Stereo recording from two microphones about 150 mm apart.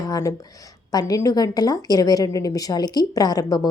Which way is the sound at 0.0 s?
25° left (ahead or behind).